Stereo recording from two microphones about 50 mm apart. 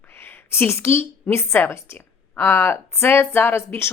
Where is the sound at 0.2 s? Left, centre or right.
Left.